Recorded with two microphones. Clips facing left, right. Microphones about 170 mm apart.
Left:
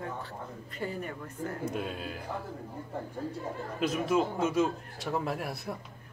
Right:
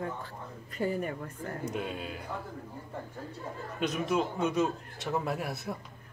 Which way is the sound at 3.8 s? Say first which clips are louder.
Left 2 dB; centre (ahead or behind).